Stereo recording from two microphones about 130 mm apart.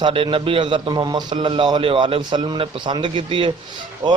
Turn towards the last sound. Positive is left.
turn(degrees=-35)  # may be behind; listen again after turning